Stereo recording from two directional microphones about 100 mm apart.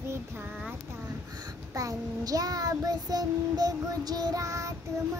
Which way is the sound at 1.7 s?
35° right (ahead or behind).